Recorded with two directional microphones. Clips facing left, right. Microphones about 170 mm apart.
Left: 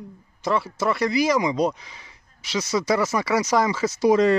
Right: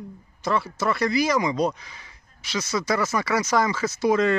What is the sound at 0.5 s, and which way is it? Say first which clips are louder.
Speech: left 1 dB; 30° left (ahead or behind).